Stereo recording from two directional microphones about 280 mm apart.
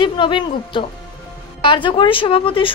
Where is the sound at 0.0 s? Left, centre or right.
Centre.